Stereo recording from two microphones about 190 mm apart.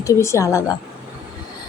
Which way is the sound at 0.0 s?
15° left (ahead or behind).